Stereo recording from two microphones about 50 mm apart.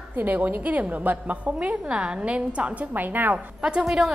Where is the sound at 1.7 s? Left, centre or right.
Centre; by 3.4 s right.